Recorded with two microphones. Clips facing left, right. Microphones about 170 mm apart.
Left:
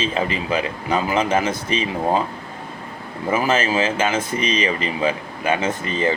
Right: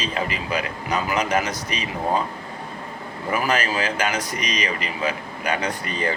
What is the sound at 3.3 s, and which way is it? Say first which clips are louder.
Speech: left 4 dB; 25° left (ahead or behind).